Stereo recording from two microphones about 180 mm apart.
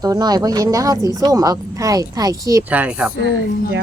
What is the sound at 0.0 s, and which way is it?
A child's voice, 20° right (ahead or behind).